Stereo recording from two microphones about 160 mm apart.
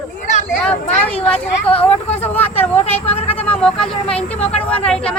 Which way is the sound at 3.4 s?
10° left (ahead or behind).